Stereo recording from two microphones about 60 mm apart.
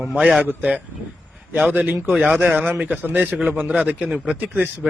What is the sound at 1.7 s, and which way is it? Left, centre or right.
A man's voice, right.